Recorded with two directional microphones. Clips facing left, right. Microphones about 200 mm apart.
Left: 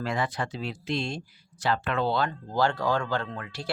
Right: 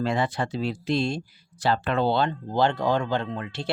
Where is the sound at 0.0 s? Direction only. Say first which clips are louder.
Right 4 dB; 25° right (ahead or behind).